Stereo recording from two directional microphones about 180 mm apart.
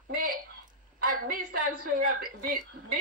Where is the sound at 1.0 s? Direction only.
50° right (ahead or behind).